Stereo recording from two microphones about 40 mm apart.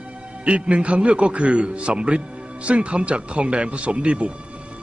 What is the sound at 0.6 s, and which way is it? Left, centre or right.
A man's voice, right.